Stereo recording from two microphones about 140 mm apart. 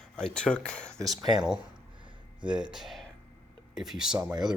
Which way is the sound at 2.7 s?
Centre (ahead or behind).